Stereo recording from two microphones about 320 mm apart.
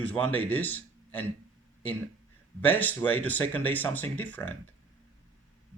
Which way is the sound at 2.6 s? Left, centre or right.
Centre.